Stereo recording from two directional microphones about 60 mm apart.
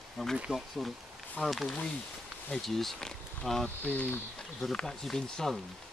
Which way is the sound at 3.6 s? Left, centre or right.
Left.